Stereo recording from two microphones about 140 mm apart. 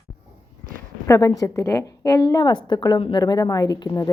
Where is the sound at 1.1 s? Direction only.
25° left (ahead or behind).